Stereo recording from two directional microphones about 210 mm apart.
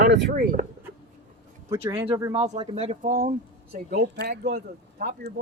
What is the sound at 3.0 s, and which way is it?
Speech, 40° right (ahead or behind).